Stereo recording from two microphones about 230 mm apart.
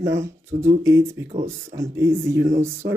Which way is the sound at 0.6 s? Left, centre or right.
Centre.